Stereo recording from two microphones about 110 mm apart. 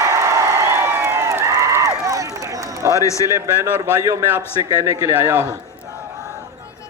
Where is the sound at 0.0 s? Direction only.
25° right (ahead or behind).